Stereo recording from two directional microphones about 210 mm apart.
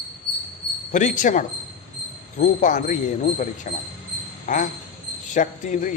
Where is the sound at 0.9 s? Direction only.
35° left (ahead or behind).